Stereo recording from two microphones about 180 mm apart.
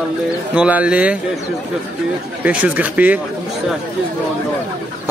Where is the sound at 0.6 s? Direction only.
5° right (ahead or behind).